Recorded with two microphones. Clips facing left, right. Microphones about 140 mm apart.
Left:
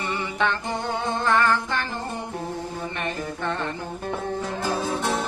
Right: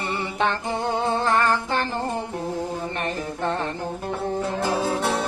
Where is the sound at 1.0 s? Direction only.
35° right (ahead or behind).